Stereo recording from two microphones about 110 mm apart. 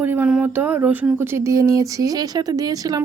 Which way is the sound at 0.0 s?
15° right (ahead or behind).